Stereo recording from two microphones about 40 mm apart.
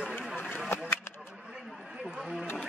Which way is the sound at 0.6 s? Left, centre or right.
Left.